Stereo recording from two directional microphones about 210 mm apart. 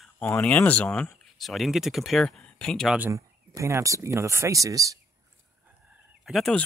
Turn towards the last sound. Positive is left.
turn(degrees=0)  # may be behind; listen again after turning